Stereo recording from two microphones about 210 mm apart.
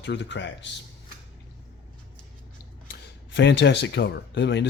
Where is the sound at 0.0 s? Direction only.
55° left (ahead or behind).